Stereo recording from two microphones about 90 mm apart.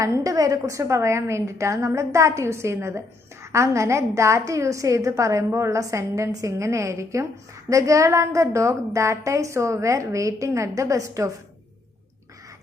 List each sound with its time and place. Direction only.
0.2 s a woman's voice: 40° right (ahead or behind)